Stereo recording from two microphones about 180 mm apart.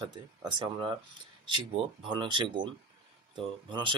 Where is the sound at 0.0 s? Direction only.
25° right (ahead or behind).